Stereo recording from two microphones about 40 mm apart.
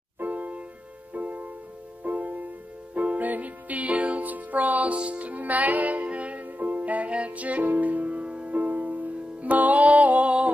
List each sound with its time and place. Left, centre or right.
0.2 s music: right
4.9 s music: right
5.3 s music: right